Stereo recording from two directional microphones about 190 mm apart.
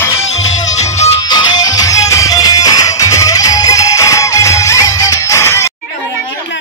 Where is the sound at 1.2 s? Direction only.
20° left (ahead or behind).